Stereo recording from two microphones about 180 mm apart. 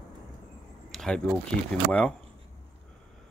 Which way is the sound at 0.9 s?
5° left (ahead or behind).